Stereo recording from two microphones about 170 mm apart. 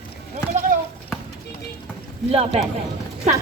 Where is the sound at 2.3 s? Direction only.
35° right (ahead or behind).